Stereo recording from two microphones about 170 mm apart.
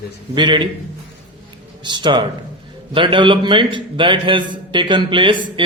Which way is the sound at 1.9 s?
25° right (ahead or behind).